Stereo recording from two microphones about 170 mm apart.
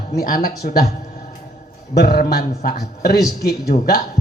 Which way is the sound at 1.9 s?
60° left (ahead or behind).